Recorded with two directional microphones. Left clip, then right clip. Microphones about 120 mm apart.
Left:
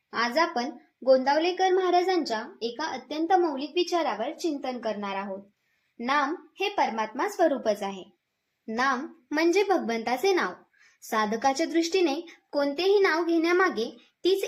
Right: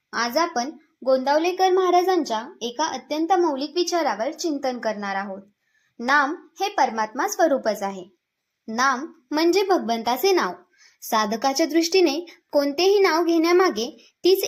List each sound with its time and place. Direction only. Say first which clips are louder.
0.1 s a woman's voice: right 3 dB; 35° right (ahead or behind); by 4.9 s 50° right (ahead or behind)
4.9 s a woman's voice: right 5 dB; 35° right (ahead or behind)